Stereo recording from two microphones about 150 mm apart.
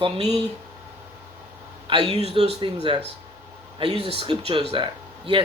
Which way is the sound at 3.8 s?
40° right (ahead or behind).